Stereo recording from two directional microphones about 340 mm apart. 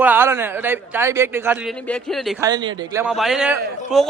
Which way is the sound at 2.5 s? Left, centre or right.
Centre.